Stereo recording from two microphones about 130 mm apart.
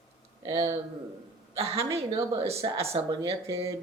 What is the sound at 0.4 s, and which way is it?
A man's voice, 45° right (ahead or behind).